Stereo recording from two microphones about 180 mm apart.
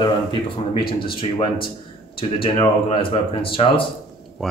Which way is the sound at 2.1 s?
30° left (ahead or behind).